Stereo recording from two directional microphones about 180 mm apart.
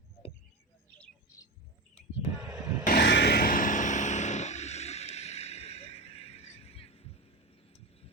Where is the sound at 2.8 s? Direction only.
60° left (ahead or behind); by 7.1 s 35° left (ahead or behind).